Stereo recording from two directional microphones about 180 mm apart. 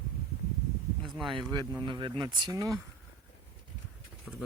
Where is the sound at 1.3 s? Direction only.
25° right (ahead or behind).